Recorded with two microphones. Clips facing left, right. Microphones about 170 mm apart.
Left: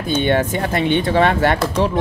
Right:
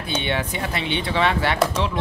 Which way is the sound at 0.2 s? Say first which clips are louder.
Left 8 dB; 45° left (ahead or behind).